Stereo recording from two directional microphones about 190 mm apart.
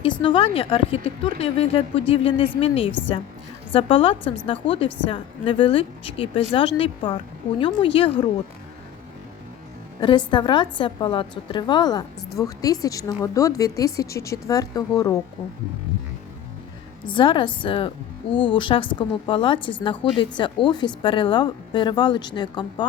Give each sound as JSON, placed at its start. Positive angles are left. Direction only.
{"t": 0.0, "sound": "a woman's voice", "side_deg": 30}
{"t": 10.0, "sound": "a woman's voice", "side_deg": 25}
{"t": 17.1, "sound": "a woman's voice", "side_deg": 25}